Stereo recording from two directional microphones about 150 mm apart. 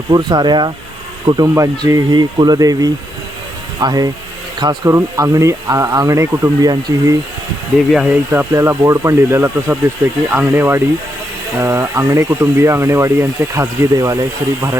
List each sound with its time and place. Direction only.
0.1 s speech: 30° right (ahead or behind)
7.9 s speech: 10° right (ahead or behind)